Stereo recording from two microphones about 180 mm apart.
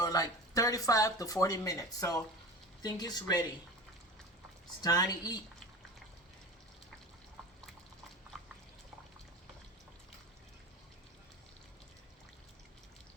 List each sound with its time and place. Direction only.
0.0 s speech: 20° left (ahead or behind)
4.8 s speech: 20° left (ahead or behind)